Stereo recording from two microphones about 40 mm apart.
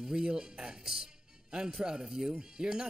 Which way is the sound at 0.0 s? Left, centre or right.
Centre.